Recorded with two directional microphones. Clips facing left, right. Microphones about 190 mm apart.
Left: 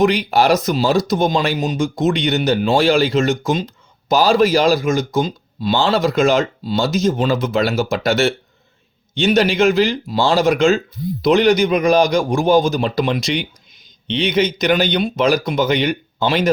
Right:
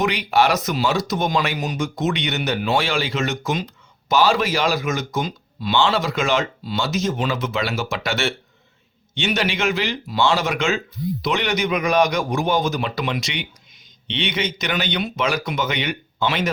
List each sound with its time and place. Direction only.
0.0 s a man's voice: 35° left (ahead or behind)